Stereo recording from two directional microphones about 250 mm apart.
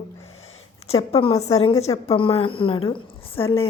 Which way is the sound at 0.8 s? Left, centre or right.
Left.